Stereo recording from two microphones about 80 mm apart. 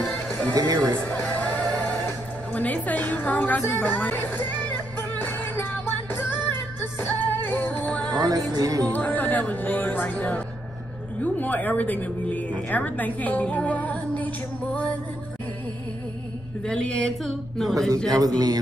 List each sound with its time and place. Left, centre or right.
0.1 s music: centre
0.6 s a man's voice: right
1.0 s music: centre
8.2 s music: right
8.9 s speech: left
16.6 s a woman's voice: centre
17.2 s speech: centre
18.1 s a man's voice: right